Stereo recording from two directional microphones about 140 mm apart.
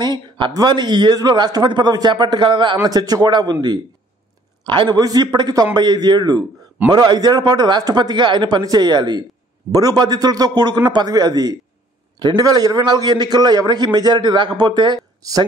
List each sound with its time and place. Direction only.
0.0 s a sound: 30° right (ahead or behind)
0.6 s a man's voice: 30° right (ahead or behind)
4.6 s a man's voice: 35° right (ahead or behind)